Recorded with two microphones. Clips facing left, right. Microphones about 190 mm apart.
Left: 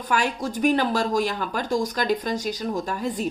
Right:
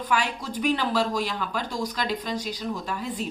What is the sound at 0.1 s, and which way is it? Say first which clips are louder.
Speech: left 4 dB; 45° left (ahead or behind).